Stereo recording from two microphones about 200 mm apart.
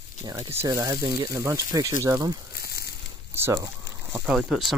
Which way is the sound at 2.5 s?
50° left (ahead or behind).